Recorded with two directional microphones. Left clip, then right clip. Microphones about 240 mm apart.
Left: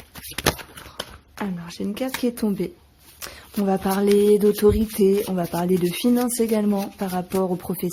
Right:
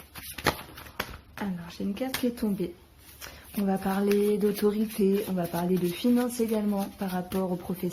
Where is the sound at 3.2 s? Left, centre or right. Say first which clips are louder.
Left 7 dB; left.